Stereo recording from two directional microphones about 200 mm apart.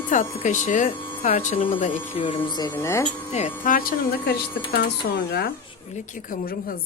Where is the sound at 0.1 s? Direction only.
40° left (ahead or behind); by 3.1 s 15° left (ahead or behind).